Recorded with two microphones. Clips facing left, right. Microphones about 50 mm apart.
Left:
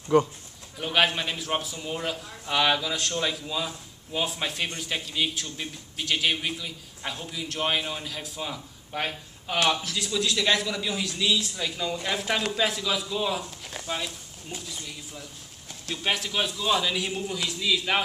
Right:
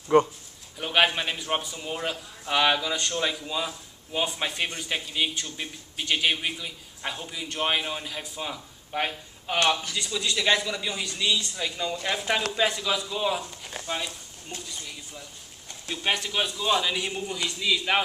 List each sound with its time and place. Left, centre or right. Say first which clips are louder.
0.1 s speech: right 1 dB; right
0.7 s a man's voice: right 1 dB; centre